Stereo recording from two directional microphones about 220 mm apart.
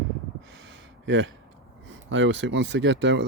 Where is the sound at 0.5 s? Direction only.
55° right (ahead or behind).